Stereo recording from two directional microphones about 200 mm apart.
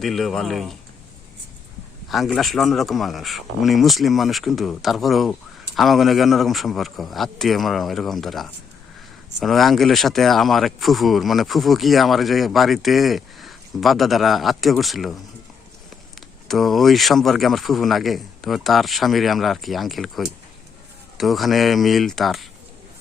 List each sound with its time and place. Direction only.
0.0 s speech: centre (ahead or behind)
2.0 s speech: centre (ahead or behind)
16.5 s speech: centre (ahead or behind)